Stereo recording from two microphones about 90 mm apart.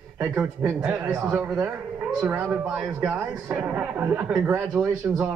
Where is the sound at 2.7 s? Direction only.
10° right (ahead or behind).